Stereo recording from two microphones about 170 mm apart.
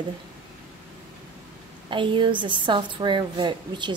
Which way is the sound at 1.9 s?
30° right (ahead or behind).